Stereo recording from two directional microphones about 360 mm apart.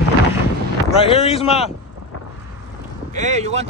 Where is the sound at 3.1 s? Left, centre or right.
Centre.